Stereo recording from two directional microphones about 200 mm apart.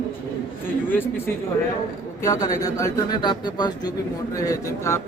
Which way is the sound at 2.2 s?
15° left (ahead or behind).